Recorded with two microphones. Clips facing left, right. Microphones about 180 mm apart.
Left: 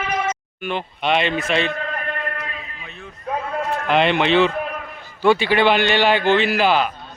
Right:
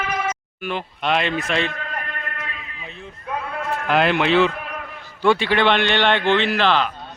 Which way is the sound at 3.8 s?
Centre (ahead or behind).